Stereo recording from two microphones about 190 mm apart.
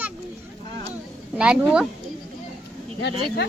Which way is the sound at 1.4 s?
5° right (ahead or behind).